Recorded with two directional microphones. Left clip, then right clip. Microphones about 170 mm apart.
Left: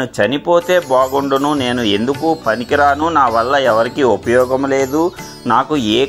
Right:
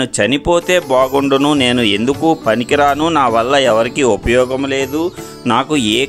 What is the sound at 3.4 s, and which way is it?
Speech, 45° right (ahead or behind).